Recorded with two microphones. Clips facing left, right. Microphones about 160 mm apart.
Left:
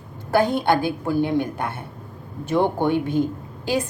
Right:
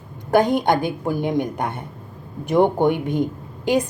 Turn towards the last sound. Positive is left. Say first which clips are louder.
# right 4 dB
turn(degrees=-20)  # may be behind; listen again after turning